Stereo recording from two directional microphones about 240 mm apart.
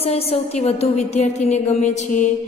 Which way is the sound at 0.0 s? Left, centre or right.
Left.